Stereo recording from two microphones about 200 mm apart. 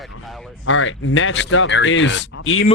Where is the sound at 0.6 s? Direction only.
75° left (ahead or behind).